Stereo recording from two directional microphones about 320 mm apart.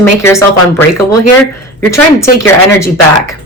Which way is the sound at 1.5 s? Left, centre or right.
Left.